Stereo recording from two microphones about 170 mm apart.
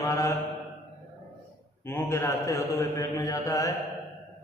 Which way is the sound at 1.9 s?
15° left (ahead or behind).